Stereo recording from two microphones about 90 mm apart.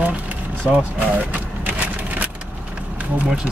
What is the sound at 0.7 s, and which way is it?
Vehicle, 15° right (ahead or behind).